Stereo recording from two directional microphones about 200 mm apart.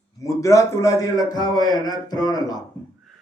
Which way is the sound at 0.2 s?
15° left (ahead or behind).